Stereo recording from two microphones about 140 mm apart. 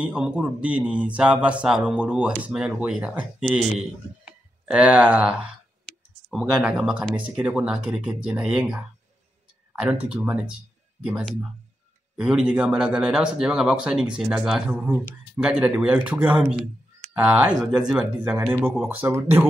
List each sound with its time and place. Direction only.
0.0 s speech: 10° right (ahead or behind)